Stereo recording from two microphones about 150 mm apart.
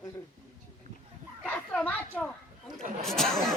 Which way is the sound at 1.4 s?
10° left (ahead or behind).